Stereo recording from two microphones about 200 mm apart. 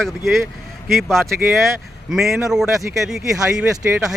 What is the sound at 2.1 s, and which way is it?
Speech, centre (ahead or behind).